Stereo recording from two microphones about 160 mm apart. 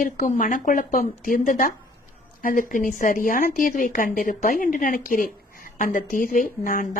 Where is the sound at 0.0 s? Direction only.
50° left (ahead or behind).